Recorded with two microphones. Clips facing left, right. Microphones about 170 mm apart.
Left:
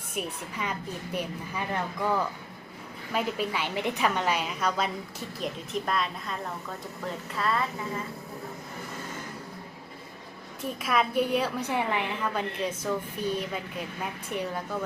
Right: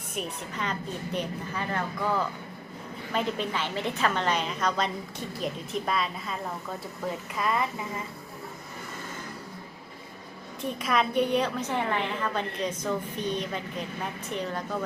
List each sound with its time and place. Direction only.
0.2 s a woman's voice: 10° left (ahead or behind); by 8.0 s 15° right (ahead or behind)
10.6 s a woman's voice: 5° left (ahead or behind)